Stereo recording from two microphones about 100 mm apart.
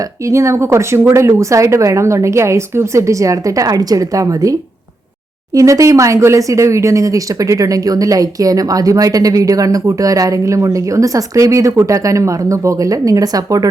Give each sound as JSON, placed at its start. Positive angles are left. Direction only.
{"t": 0.3, "sound": "speech", "side_deg": -30}
{"t": 5.5, "sound": "speech", "side_deg": -30}